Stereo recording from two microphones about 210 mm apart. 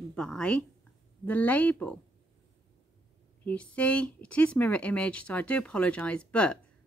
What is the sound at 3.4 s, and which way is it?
Speech, 5° left (ahead or behind).